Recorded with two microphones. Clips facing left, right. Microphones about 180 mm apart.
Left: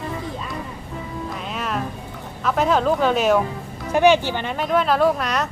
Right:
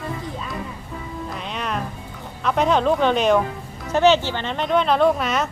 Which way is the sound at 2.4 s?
Centre (ahead or behind).